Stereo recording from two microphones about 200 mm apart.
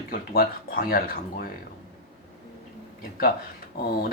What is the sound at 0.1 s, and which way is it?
Speech, 45° left (ahead or behind).